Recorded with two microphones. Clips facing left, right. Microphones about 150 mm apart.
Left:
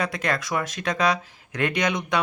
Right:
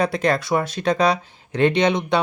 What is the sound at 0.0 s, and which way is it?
Speech, 30° right (ahead or behind).